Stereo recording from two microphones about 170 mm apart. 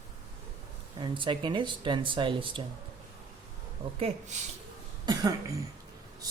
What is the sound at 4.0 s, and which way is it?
Speech, 40° right (ahead or behind).